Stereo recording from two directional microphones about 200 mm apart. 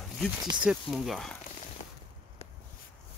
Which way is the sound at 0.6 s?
5° right (ahead or behind).